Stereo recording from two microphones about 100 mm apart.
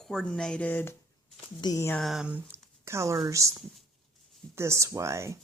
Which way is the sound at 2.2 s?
15° right (ahead or behind).